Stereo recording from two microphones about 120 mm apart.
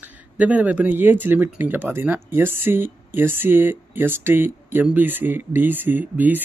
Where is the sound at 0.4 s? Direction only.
10° right (ahead or behind).